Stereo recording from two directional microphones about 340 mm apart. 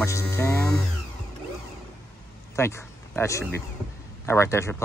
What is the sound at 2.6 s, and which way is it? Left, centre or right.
Speech, centre.